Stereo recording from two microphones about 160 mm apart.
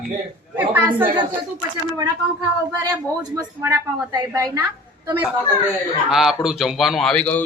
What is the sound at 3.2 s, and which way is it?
A woman's voice, 20° right (ahead or behind).